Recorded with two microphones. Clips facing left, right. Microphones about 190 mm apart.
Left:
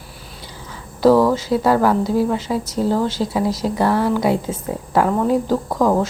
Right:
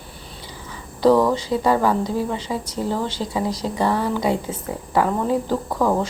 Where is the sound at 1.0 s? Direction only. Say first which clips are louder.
Left 3 dB; 5° left (ahead or behind).